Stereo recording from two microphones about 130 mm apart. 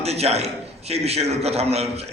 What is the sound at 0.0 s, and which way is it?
A man's voice, 55° right (ahead or behind).